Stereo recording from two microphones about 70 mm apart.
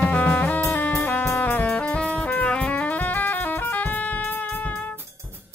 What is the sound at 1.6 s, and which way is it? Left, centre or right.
Music, centre.